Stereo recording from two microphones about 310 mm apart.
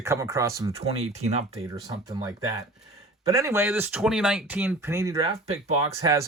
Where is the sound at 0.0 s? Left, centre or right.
Centre.